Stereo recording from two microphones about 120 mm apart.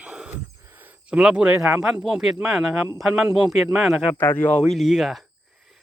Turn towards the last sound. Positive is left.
turn(degrees=-5)  # may be behind; listen again after turning